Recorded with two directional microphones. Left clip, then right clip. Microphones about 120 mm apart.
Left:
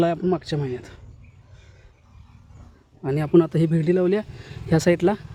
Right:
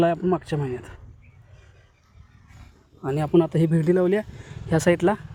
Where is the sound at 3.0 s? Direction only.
35° left (ahead or behind).